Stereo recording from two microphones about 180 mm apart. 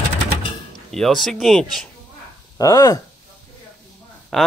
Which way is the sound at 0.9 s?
Centre (ahead or behind).